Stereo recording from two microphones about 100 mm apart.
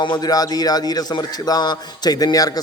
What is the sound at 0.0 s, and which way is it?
Speech, 45° left (ahead or behind).